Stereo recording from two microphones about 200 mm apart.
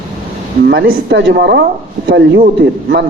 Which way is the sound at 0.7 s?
65° right (ahead or behind).